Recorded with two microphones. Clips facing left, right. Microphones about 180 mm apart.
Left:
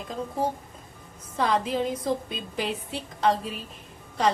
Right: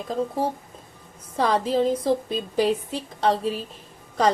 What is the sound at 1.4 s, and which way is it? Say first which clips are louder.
A woman's voice: right 4 dB; 35° right (ahead or behind).